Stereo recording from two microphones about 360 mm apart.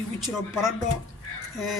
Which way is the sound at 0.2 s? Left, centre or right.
Centre.